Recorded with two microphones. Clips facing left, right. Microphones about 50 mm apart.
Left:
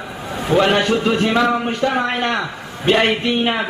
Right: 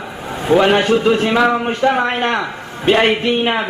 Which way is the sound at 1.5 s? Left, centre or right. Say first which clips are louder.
Right 3 dB; right.